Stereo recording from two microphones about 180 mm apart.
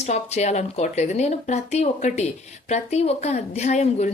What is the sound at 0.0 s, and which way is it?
Speech, 40° left (ahead or behind).